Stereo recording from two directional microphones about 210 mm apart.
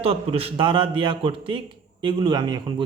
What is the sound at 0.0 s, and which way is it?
Speech, 25° right (ahead or behind).